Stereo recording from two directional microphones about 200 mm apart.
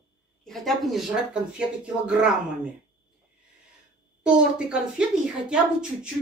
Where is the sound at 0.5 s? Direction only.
Centre (ahead or behind).